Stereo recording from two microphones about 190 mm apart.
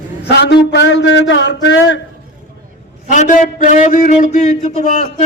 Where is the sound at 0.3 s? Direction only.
60° left (ahead or behind).